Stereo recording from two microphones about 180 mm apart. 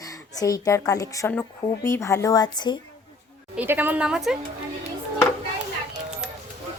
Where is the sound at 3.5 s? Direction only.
10° right (ahead or behind).